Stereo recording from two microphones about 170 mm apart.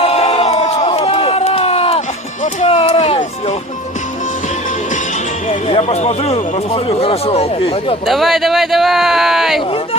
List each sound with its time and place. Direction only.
0.0 s crowd: 35° left (ahead or behind)
5.5 s speech: 35° left (ahead or behind)
8.0 s speech: centre (ahead or behind)